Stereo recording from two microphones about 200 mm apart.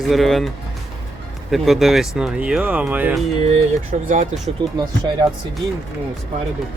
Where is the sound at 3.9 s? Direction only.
35° right (ahead or behind).